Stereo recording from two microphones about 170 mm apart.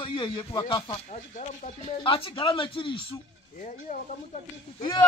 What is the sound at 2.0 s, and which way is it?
Speech, 30° left (ahead or behind).